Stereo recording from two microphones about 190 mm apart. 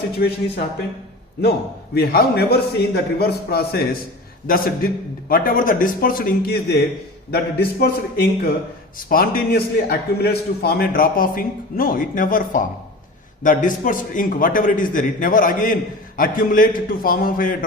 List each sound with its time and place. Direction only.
0.2 s a man's voice: 50° left (ahead or behind)
2.0 s a man's voice: 55° left (ahead or behind)